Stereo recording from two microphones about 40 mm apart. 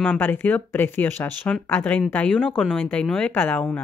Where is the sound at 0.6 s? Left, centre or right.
Left.